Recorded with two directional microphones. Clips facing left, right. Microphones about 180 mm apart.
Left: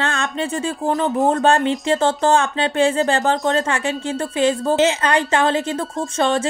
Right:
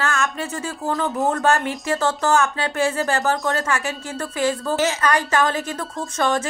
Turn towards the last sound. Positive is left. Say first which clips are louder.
# left 3 dB
turn(degrees=25)  # may be behind; listen again after turning